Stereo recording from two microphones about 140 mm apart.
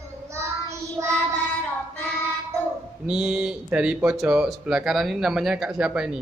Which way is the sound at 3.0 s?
5° right (ahead or behind).